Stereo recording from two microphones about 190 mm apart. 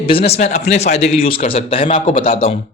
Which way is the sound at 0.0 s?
30° left (ahead or behind).